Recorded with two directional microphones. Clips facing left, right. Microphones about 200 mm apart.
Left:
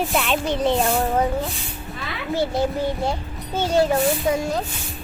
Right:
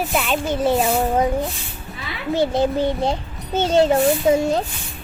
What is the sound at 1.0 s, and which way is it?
A child's voice, 15° right (ahead or behind).